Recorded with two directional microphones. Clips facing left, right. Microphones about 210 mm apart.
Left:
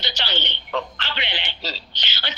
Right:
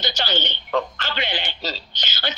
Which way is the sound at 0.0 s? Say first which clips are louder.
Right 4 dB; 45° right (ahead or behind).